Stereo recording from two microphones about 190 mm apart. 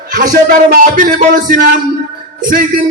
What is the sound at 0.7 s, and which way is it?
Music, 45° right (ahead or behind).